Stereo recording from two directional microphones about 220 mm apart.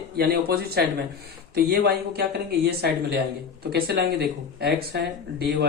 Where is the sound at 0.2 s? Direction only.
45° right (ahead or behind).